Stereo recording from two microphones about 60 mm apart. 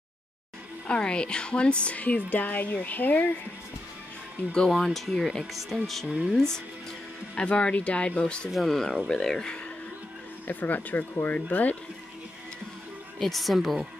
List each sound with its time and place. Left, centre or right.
0.8 s a woman's voice: centre
4.6 s speech: centre
6.2 s speech: centre
7.3 s a woman's voice: centre
8.5 s speech: centre
10.4 s a woman's voice: left
13.2 s speech: centre